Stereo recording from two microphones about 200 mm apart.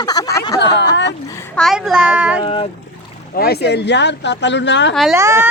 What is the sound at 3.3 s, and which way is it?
Speech, 50° left (ahead or behind).